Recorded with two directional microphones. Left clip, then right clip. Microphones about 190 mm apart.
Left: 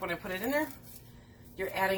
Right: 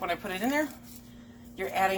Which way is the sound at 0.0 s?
45° right (ahead or behind).